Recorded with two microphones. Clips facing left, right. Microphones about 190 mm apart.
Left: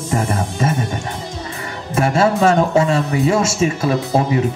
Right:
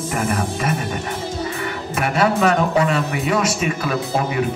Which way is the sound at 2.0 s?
30° left (ahead or behind).